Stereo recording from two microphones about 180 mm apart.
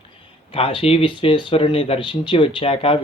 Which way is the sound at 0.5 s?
30° left (ahead or behind).